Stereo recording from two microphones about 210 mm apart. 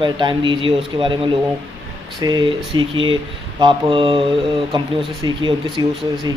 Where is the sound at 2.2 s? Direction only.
20° right (ahead or behind).